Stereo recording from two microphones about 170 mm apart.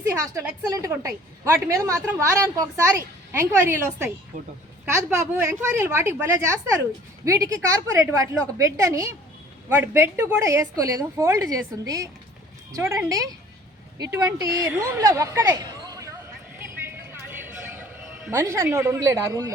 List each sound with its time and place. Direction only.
0.0 s a woman's voice: 15° right (ahead or behind)
4.3 s a woman's voice: 50° right (ahead or behind)
5.1 s a woman's voice: 15° right (ahead or behind)
16.8 s a sound: 15° right (ahead or behind)
18.3 s a woman's voice: 15° right (ahead or behind)